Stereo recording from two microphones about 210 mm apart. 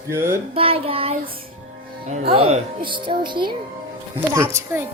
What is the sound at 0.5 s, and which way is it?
Child singing, 25° right (ahead or behind).